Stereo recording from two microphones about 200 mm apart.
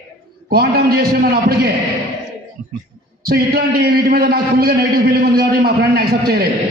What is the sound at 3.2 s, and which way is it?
A man's voice, 50° right (ahead or behind).